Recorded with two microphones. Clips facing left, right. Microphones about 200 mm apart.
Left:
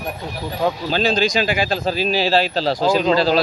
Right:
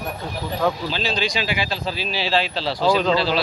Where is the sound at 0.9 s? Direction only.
45° left (ahead or behind).